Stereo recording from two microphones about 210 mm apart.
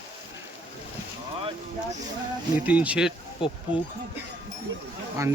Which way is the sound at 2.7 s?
5° right (ahead or behind).